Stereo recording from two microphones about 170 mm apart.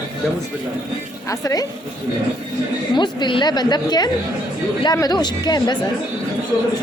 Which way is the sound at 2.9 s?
25° left (ahead or behind).